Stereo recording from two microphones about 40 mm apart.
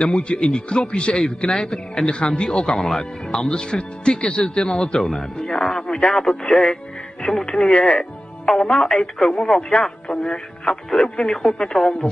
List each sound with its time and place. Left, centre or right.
0.0 s a man's voice: left; by 3.4 s centre
3.4 s a man's voice: centre
10.2 s music: centre
10.7 s speech: centre